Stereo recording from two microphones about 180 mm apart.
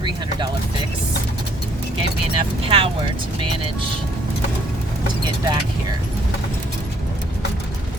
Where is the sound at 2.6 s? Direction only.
30° right (ahead or behind).